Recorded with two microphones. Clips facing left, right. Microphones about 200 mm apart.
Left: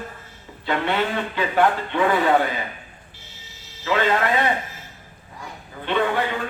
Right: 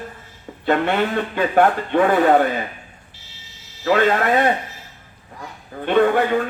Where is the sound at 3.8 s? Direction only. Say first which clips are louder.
Right 4 dB; 50° right (ahead or behind).